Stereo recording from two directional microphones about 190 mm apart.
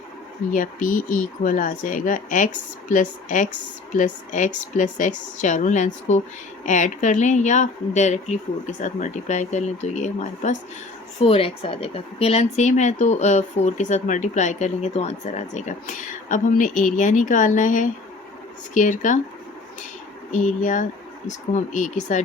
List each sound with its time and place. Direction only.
0.5 s speech: 45° left (ahead or behind)
20.3 s speech: 40° left (ahead or behind)